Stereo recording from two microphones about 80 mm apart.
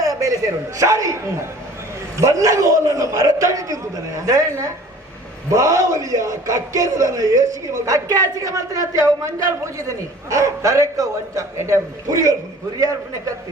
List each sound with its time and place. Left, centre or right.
0.0 s a sound: right
0.8 s a man's voice: right
2.2 s a man's voice: right